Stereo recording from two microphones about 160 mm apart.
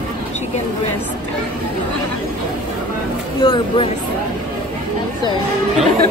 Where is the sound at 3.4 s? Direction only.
30° left (ahead or behind).